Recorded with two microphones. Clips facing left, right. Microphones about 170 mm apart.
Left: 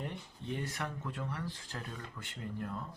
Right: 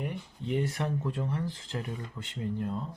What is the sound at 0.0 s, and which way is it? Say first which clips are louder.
Speech: right 6 dB; 15° right (ahead or behind).